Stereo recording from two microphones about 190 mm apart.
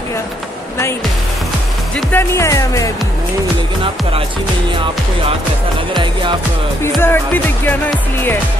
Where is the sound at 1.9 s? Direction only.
10° left (ahead or behind).